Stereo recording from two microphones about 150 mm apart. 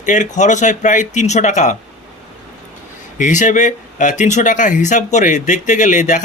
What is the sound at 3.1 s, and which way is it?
Speech, 60° left (ahead or behind).